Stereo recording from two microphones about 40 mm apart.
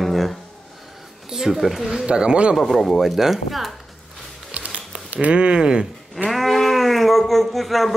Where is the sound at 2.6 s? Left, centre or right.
Centre.